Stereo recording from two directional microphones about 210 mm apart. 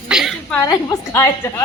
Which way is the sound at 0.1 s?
Centre (ahead or behind).